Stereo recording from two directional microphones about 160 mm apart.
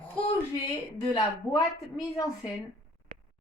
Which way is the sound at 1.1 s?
30° left (ahead or behind).